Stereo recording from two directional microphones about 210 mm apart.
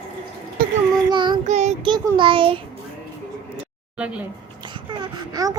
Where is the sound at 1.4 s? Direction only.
35° right (ahead or behind).